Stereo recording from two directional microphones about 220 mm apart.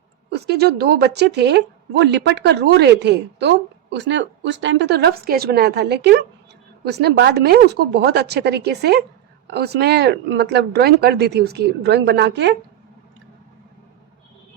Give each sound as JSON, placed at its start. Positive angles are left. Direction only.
{"t": 0.3, "sound": "speech", "side_deg": -50}